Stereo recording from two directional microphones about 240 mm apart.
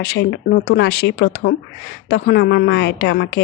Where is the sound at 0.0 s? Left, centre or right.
Left.